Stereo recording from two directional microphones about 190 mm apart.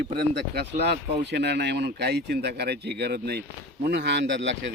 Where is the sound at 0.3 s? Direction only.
60° right (ahead or behind).